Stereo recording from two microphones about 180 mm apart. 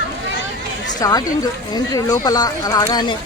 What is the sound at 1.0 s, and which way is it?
Speech, 20° left (ahead or behind).